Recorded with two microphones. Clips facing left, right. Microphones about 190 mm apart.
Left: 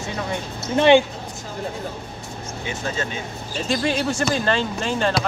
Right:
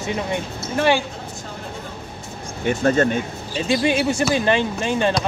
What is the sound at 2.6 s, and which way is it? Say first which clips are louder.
Speech: right 11 dB; 55° right (ahead or behind).